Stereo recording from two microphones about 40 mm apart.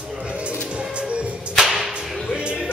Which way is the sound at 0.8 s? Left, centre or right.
Right.